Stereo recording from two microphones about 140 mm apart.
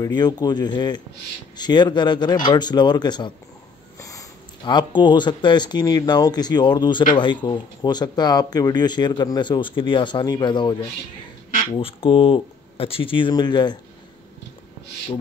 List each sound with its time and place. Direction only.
0.0 s speech: 30° left (ahead or behind)
11.8 s speech: 40° left (ahead or behind)